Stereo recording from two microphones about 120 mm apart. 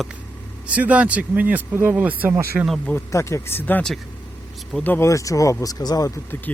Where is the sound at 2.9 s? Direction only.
25° left (ahead or behind).